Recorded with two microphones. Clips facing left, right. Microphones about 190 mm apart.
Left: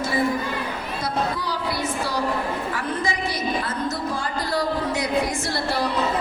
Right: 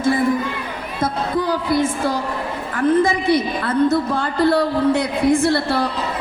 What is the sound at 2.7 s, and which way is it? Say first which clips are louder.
A woman's voice: right 10 dB; 55° right (ahead or behind).